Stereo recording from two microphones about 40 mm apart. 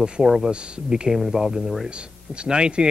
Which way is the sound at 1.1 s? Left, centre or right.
Centre.